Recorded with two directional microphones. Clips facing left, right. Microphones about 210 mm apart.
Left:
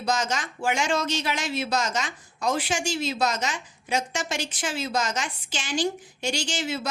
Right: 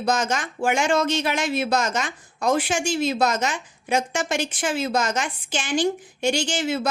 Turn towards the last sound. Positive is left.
turn(degrees=-55)  # may be behind; listen again after turning